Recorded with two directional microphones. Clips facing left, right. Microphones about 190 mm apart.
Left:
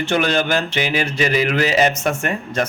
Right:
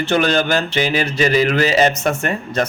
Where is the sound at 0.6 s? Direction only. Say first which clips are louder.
Right 2 dB; 35° right (ahead or behind).